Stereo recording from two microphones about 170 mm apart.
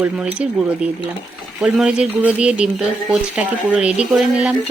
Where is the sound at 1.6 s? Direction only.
5° right (ahead or behind).